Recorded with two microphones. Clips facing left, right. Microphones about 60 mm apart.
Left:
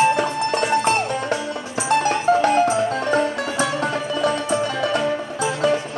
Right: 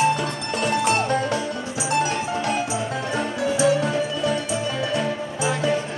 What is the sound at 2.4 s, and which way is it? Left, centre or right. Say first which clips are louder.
Music: left 7 dB; left.